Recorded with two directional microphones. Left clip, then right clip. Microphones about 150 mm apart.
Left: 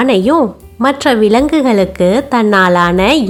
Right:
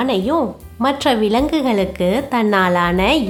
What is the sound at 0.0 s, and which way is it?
Speech, 30° left (ahead or behind).